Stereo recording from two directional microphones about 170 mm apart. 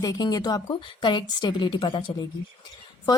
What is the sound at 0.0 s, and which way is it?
A woman's voice, 25° left (ahead or behind).